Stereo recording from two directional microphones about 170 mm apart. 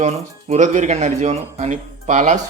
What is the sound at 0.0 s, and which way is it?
Speech, 40° right (ahead or behind).